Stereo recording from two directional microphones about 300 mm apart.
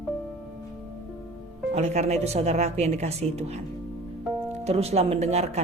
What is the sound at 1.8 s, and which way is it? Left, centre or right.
Speech, right.